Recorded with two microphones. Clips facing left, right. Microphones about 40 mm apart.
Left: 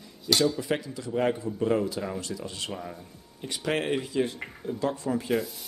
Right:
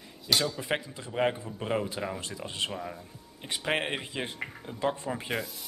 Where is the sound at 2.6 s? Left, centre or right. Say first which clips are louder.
Even; centre.